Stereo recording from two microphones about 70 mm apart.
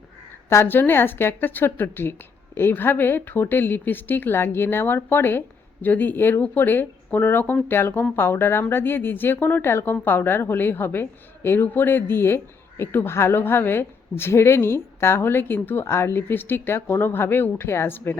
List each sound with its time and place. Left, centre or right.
0.5 s speech: left